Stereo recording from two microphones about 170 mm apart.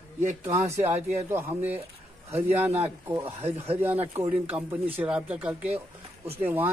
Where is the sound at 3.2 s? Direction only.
35° right (ahead or behind).